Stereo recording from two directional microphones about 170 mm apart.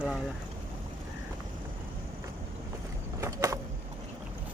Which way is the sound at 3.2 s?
20° right (ahead or behind).